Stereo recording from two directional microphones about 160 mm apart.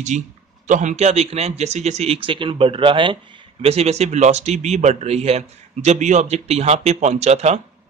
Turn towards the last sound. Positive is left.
turn(degrees=-45)  # may be behind; listen again after turning